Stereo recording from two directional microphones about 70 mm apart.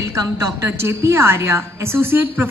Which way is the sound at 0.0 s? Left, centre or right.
Right.